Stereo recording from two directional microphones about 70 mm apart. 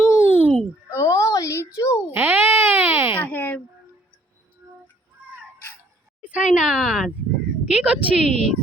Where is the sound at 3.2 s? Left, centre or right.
Left.